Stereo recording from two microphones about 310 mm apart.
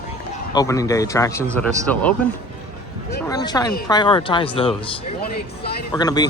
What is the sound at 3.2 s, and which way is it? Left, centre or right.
Speech, centre.